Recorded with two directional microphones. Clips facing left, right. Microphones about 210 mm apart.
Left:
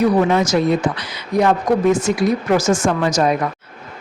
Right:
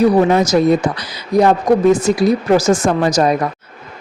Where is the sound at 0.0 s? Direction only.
40° right (ahead or behind).